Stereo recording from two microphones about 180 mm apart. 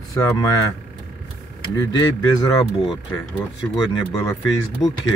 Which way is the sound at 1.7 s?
20° left (ahead or behind).